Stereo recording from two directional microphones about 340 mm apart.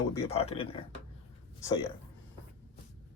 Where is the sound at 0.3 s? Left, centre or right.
Centre.